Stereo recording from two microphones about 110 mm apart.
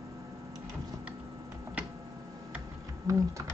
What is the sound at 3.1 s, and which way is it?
Speech, 30° right (ahead or behind).